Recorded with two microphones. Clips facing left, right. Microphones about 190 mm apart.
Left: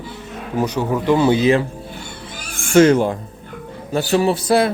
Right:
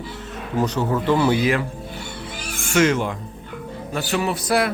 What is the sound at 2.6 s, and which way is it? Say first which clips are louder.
A man's voice: left 7 dB; 30° left (ahead or behind).